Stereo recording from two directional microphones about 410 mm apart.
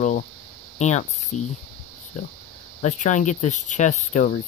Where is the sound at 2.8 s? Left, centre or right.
Centre.